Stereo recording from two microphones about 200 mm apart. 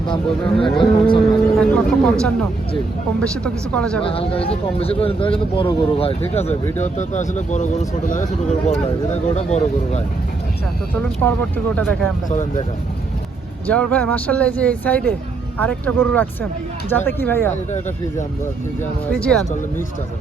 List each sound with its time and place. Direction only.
0.6 s speech: 25° left (ahead or behind)
1.3 s speech: 5° left (ahead or behind)
3.2 s speech: 5° left (ahead or behind)
4.0 s speech: 30° left (ahead or behind)
11.2 s speech: 10° left (ahead or behind)
12.3 s speech: 40° left (ahead or behind)
13.7 s speech: 5° left (ahead or behind)
19.1 s speech: 5° left (ahead or behind)